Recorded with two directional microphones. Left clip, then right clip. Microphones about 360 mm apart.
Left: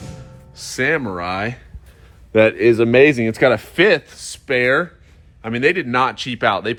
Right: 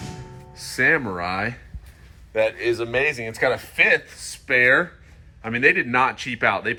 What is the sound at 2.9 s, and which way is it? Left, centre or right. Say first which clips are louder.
Speech: left 9 dB; left.